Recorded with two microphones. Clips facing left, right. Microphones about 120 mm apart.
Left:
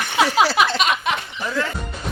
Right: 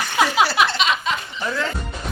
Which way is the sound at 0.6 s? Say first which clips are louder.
Left 1 dB; 50° left (ahead or behind).